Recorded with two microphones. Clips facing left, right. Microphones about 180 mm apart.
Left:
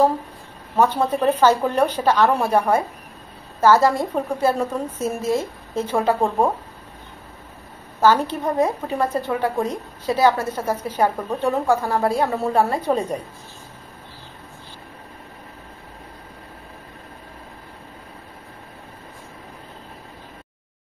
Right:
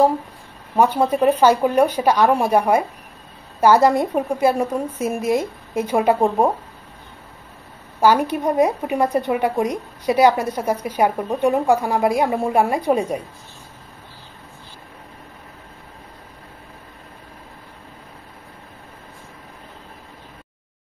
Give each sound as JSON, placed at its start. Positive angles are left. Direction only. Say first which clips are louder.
{"t": 0.7, "sound": "speech", "louder": "right 2 dB", "side_deg": -10}
{"t": 8.0, "sound": "speech", "louder": "right 1 dB", "side_deg": -15}